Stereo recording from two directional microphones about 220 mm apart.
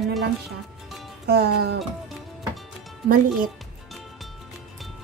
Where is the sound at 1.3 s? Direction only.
50° right (ahead or behind).